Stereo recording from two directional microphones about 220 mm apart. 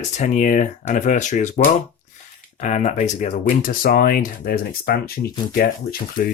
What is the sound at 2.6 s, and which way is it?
Speech, 30° left (ahead or behind).